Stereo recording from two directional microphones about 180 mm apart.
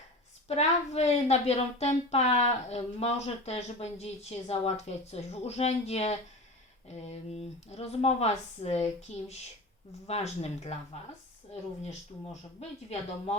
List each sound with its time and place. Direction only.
0.4 s speech: 35° left (ahead or behind)
11.9 s speech: 35° left (ahead or behind)